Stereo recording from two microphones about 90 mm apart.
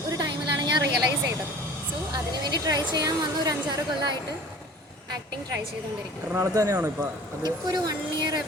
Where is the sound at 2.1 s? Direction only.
50° right (ahead or behind).